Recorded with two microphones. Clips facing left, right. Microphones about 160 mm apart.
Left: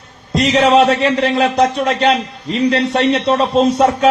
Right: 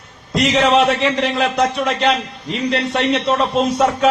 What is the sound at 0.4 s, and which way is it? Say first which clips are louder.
A man's voice: left 3 dB; 30° left (ahead or behind).